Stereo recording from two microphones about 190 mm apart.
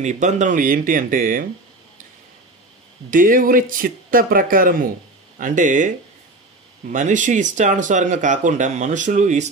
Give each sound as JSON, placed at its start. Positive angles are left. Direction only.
{"t": 0.0, "sound": "speech", "side_deg": -40}
{"t": 3.1, "sound": "speech", "side_deg": -45}